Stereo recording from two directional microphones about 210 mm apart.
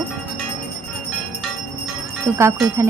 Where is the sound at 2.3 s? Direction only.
15° right (ahead or behind).